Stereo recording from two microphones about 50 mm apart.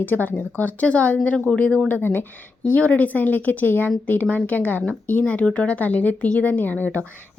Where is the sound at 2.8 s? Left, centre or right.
Left.